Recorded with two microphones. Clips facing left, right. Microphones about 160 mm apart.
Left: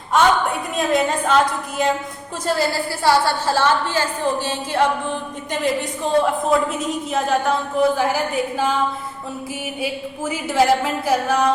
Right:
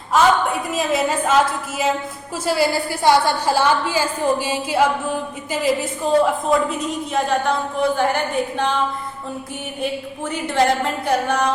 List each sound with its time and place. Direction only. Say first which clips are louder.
0.1 s a woman's voice: right 1 dB; centre (ahead or behind)
2.5 s a woman's voice: right 2 dB; 15° right (ahead or behind); by 8.7 s 5° left (ahead or behind)
9.8 s a woman's voice: right 1 dB; 5° left (ahead or behind)